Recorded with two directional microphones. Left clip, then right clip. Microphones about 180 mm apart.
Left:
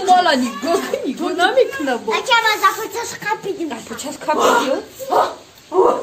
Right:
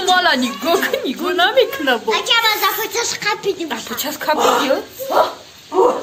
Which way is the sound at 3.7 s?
5° right (ahead or behind).